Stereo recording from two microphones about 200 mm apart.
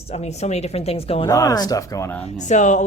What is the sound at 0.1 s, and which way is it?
Speech, 35° left (ahead or behind).